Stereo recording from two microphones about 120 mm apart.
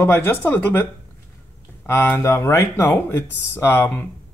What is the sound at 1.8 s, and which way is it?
Speech, 20° left (ahead or behind).